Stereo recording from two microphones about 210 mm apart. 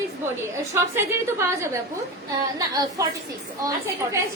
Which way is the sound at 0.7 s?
15° right (ahead or behind).